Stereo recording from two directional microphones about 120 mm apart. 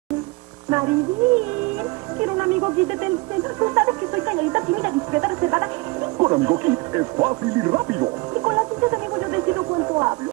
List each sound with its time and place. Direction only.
0.7 s music: 20° right (ahead or behind)
2.2 s speech: 20° right (ahead or behind)
8.5 s a sound: 20° right (ahead or behind)